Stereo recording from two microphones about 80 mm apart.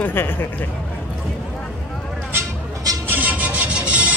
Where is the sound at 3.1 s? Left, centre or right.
Right.